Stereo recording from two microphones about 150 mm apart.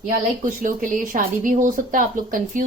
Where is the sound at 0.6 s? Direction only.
60° right (ahead or behind).